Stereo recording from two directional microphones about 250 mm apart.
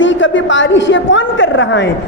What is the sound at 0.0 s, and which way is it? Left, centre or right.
A man's voice, left.